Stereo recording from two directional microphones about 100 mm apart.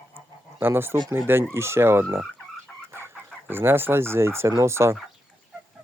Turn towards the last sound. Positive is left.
turn(degrees=-30)  # may be behind; listen again after turning